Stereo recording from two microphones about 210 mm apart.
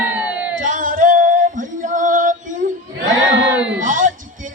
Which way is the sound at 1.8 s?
40° right (ahead or behind).